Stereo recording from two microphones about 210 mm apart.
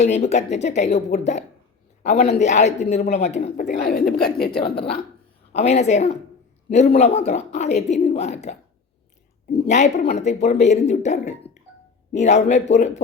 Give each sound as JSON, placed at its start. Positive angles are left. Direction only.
{"t": 0.0, "sound": "a woman's voice", "side_deg": 30}
{"t": 3.7, "sound": "speech", "side_deg": 45}
{"t": 5.5, "sound": "a woman's voice", "side_deg": 30}